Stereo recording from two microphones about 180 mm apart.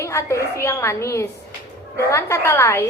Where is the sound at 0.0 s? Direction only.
15° left (ahead or behind).